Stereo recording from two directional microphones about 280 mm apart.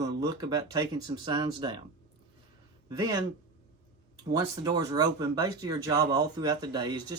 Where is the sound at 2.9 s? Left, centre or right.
Centre.